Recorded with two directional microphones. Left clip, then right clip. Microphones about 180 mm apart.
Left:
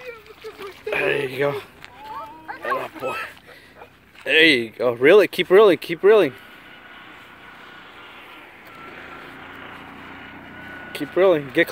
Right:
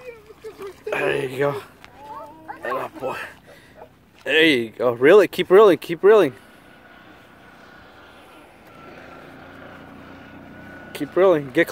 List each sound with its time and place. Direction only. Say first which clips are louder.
0.0 s a sound: left 1 dB; centre (ahead or behind)
2.4 s music: left 1 dB; centre (ahead or behind)
4.2 s speech: left 2 dB; centre (ahead or behind)
8.8 s vehicle: left 3 dB; 55° right (ahead or behind); by 10.9 s 35° right (ahead or behind)
10.9 s speech: even; centre (ahead or behind)